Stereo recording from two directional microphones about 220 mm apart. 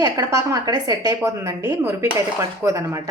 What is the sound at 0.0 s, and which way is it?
A woman's voice, 15° right (ahead or behind).